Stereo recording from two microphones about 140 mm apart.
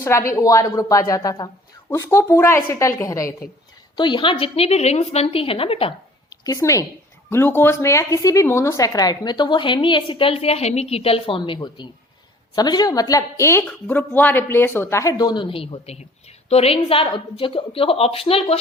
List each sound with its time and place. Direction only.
0.0 s a woman's voice: 20° left (ahead or behind)
3.9 s speech: 35° left (ahead or behind)
6.3 s a woman's voice: 25° left (ahead or behind); by 18.5 s 45° left (ahead or behind)